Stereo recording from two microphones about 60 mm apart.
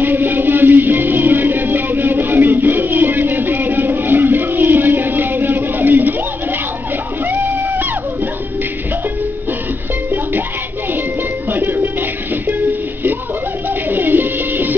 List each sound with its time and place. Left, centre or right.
0.0 s music: right
7.2 s music: right
11.5 s music: right
13.8 s music: right